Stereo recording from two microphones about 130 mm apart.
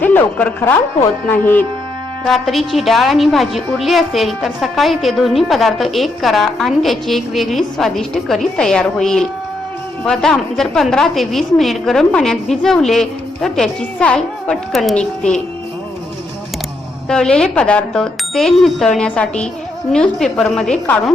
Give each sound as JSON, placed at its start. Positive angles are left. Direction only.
{"t": 0.0, "sound": "a woman's voice", "side_deg": 15}
{"t": 2.2, "sound": "a woman's voice", "side_deg": 0}
{"t": 17.1, "sound": "a woman's voice", "side_deg": 5}